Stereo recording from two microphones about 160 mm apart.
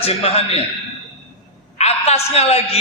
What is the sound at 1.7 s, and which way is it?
A woman's voice, 40° left (ahead or behind).